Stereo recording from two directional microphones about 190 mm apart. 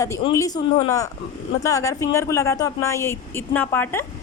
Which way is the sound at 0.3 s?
20° left (ahead or behind).